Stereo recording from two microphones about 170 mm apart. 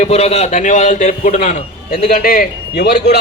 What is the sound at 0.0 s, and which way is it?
A man's voice, 35° left (ahead or behind).